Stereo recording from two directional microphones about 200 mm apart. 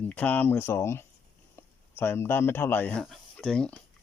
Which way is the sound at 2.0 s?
10° left (ahead or behind).